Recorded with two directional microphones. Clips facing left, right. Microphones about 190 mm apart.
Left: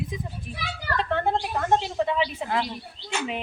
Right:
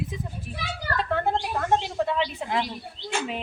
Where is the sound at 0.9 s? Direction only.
5° right (ahead or behind).